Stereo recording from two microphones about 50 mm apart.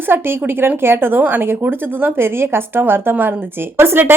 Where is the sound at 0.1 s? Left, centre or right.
Right.